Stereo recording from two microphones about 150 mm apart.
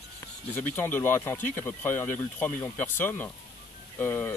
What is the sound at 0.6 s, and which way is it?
Speech, 10° left (ahead or behind).